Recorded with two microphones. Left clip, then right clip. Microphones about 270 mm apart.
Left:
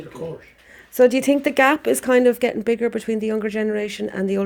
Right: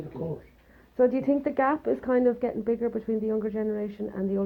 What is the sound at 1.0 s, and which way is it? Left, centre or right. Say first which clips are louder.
Speech: left 8 dB; left.